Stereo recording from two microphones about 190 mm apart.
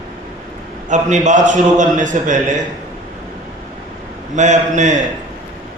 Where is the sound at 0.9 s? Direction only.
40° right (ahead or behind).